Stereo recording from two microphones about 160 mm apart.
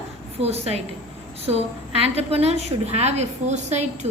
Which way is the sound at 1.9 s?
40° right (ahead or behind).